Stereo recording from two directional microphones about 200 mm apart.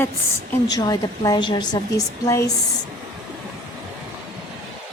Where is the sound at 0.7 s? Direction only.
20° left (ahead or behind).